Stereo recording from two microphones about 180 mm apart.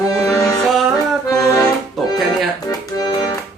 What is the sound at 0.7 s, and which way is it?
Music, centre (ahead or behind).